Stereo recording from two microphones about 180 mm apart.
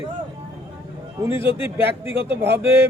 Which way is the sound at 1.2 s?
15° right (ahead or behind).